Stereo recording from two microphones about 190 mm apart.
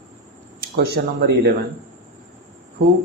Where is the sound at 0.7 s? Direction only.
55° right (ahead or behind).